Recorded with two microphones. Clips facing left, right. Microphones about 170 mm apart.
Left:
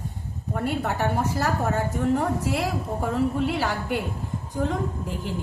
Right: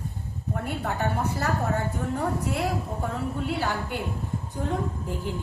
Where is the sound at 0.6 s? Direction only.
85° left.